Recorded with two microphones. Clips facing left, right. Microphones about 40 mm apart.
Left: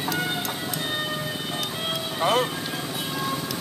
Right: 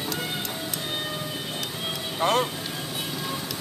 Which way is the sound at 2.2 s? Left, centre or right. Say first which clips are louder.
Left 1 dB; centre.